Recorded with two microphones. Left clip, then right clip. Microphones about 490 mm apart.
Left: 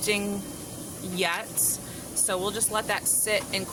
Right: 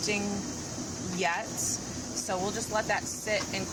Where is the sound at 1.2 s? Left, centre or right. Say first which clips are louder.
Left 2 dB; left.